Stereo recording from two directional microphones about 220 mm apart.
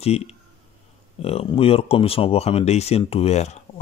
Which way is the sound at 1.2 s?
25° left (ahead or behind).